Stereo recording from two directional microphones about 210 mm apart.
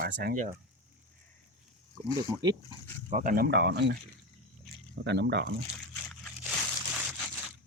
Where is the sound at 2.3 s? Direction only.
20° right (ahead or behind).